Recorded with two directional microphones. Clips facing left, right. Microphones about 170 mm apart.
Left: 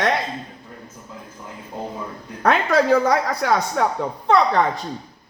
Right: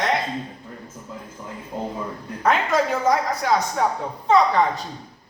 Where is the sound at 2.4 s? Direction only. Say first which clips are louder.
Left 3 dB; 70° left (ahead or behind).